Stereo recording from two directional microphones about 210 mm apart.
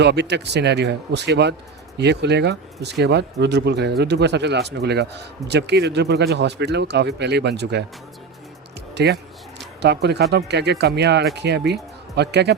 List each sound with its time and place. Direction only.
0.0 s speech: 50° right (ahead or behind)
9.0 s speech: 55° right (ahead or behind)